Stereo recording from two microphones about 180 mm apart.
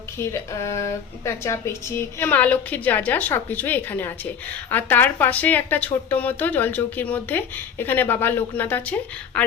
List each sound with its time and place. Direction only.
0.2 s speech: 15° left (ahead or behind)